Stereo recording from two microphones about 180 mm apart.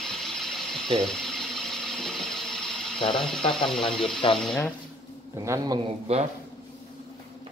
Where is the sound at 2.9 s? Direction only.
25° left (ahead or behind).